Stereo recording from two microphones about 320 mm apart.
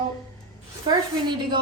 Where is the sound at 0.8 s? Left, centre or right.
Centre.